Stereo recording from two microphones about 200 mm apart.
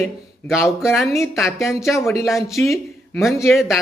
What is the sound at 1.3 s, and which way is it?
Speech, centre (ahead or behind).